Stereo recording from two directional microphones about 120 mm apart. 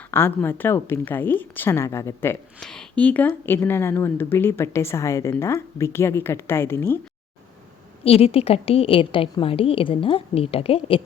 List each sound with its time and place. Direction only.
0.1 s a woman's voice: 20° left (ahead or behind)
2.6 s speech: 5° left (ahead or behind)
8.0 s a woman's voice: 55° left (ahead or behind)